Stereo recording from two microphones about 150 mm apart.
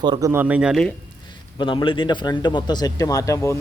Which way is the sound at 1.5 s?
35° left (ahead or behind).